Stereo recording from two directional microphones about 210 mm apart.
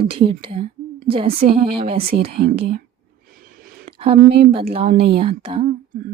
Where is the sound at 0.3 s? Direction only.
25° right (ahead or behind).